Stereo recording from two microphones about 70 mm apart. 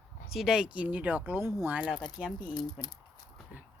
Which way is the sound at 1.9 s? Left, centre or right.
Left.